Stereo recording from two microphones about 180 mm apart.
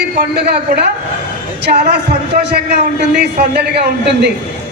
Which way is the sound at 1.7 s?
65° right (ahead or behind).